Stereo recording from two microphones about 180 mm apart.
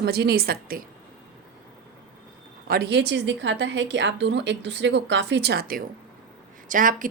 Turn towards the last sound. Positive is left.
turn(degrees=-50)  # may be behind; listen again after turning